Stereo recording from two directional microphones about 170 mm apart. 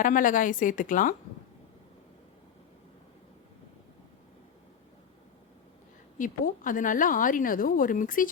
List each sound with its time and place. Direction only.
0.0 s speech: 50° left (ahead or behind)
6.1 s speech: 50° left (ahead or behind)